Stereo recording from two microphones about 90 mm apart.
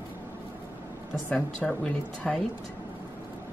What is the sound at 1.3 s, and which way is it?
Speech, 5° left (ahead or behind).